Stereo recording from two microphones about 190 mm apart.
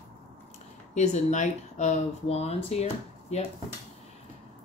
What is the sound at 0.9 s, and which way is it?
Speech, 35° left (ahead or behind).